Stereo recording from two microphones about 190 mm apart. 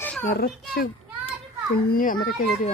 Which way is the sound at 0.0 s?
10° left (ahead or behind).